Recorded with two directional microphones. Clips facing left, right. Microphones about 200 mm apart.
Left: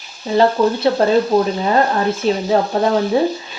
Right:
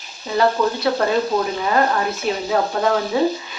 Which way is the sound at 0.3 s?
30° left (ahead or behind).